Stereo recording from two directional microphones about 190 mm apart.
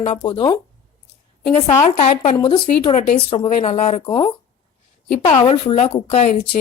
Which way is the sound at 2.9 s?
35° left (ahead or behind).